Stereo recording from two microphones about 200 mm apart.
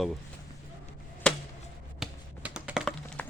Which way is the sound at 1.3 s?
5° left (ahead or behind).